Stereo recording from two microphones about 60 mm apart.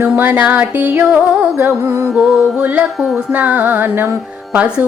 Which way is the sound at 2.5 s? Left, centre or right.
Right.